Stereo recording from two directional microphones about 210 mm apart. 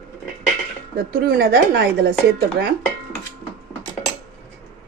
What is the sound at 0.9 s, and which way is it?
Speech, 45° right (ahead or behind).